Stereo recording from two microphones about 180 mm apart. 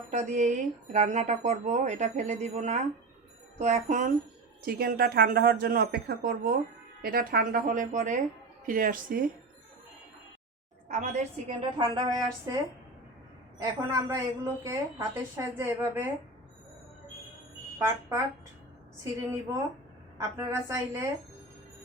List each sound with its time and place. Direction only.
0.1 s speech: 40° right (ahead or behind)
4.6 s a woman's voice: 55° right (ahead or behind)
10.8 s speech: 45° right (ahead or behind)
11.8 s speech: 20° right (ahead or behind)
13.6 s a woman's voice: 15° right (ahead or behind)
17.7 s a woman's voice: 15° right (ahead or behind)